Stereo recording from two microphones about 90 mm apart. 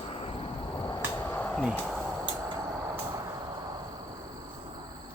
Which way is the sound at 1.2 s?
20° left (ahead or behind).